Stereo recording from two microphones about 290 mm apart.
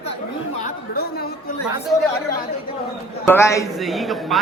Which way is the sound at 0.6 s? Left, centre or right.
Left.